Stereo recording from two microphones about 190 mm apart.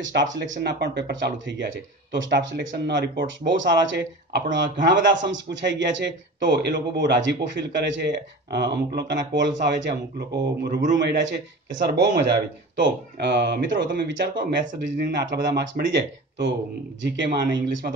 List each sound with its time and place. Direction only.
0.1 s a man's voice: 70° right (ahead or behind)